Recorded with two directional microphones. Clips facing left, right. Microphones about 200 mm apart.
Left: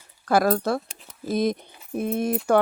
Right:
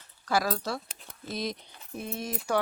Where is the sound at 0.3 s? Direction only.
55° left (ahead or behind).